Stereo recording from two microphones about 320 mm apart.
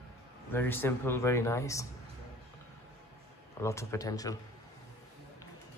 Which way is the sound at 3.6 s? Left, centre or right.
Centre.